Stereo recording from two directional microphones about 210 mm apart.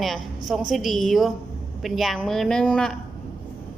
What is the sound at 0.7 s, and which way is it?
A woman's voice, centre (ahead or behind).